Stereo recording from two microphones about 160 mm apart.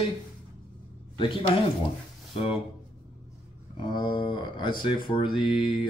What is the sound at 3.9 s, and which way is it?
Speech, 30° left (ahead or behind).